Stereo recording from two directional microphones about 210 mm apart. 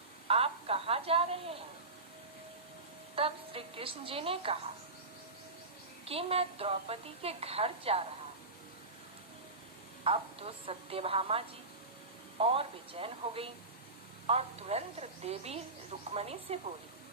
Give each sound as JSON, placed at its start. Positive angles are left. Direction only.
{"t": 0.3, "sound": "a sound", "side_deg": -25}
{"t": 3.2, "sound": "a woman's voice", "side_deg": -25}
{"t": 6.1, "sound": "a woman's voice", "side_deg": -30}
{"t": 10.0, "sound": "a woman's voice", "side_deg": -25}